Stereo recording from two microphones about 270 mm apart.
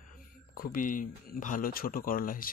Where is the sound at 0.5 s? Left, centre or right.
Left.